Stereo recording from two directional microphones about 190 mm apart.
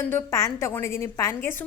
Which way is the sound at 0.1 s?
15° left (ahead or behind).